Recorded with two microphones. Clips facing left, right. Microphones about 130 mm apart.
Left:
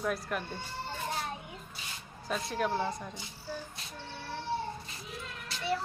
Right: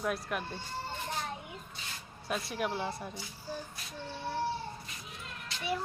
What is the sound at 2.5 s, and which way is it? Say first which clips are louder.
Speech: left 5 dB; 10° right (ahead or behind).